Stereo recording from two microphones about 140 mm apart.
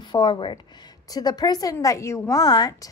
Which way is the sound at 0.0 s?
30° left (ahead or behind).